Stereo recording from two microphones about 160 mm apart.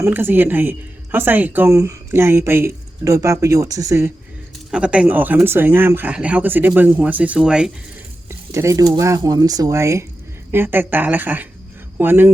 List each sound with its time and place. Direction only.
0.0 s speech: 15° right (ahead or behind)
4.7 s speech: 5° right (ahead or behind)
8.3 s speech: 20° right (ahead or behind)